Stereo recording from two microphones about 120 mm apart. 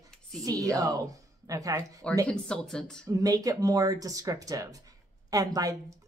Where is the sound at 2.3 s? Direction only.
5° left (ahead or behind).